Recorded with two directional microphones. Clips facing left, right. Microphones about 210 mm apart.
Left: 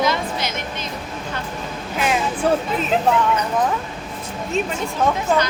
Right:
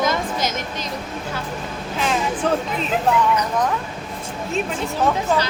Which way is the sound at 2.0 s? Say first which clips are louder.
Left 1 dB; 10° left (ahead or behind).